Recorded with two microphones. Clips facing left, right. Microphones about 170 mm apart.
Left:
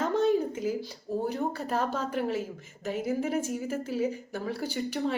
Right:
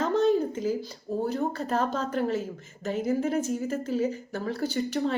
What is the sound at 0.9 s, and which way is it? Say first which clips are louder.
A woman's voice: right 2 dB; 15° left (ahead or behind).